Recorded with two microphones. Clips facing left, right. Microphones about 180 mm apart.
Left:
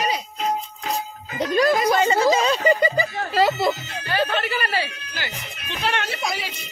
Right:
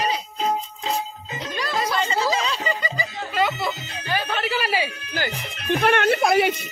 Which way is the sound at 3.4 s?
35° left (ahead or behind).